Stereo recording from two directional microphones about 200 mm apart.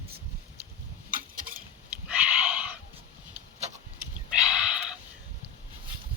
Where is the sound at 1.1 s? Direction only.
40° right (ahead or behind).